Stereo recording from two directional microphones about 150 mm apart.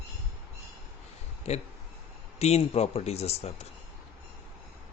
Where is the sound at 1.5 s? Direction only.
45° left (ahead or behind).